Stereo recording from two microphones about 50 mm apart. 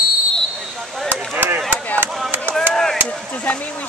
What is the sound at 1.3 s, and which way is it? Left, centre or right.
Chop, right.